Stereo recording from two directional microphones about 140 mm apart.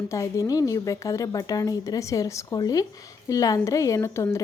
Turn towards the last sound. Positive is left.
turn(degrees=20)  # may be behind; listen again after turning